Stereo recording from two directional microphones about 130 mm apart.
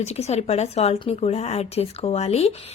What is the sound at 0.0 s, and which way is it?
A woman's voice, 55° left (ahead or behind).